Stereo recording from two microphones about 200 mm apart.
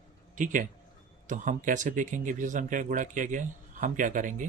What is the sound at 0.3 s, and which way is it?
Speech, 40° right (ahead or behind).